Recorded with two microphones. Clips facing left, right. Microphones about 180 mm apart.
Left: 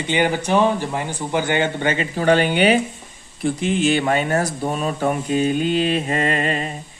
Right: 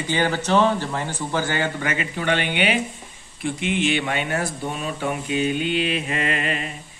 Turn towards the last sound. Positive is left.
turn(degrees=40)  # may be behind; listen again after turning